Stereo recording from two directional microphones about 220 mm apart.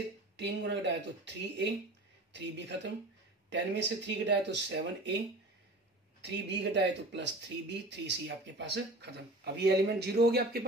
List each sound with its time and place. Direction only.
0.4 s speech: 50° right (ahead or behind)
6.2 s speech: 50° right (ahead or behind)